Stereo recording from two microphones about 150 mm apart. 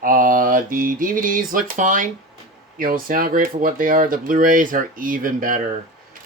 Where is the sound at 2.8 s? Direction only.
70° right (ahead or behind).